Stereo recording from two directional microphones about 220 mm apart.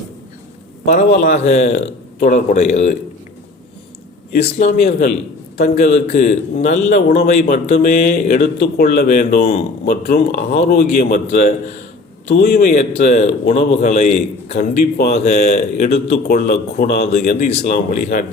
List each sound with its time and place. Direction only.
0.9 s a man's voice: 35° left (ahead or behind)
4.4 s a man's voice: 30° left (ahead or behind)
12.5 s a man's voice: 35° left (ahead or behind)
16.1 s speech: 45° left (ahead or behind)
17.1 s a man's voice: 30° left (ahead or behind)